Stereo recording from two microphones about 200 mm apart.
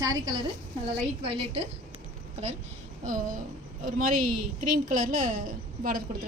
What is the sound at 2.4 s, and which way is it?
A woman's voice, 30° right (ahead or behind).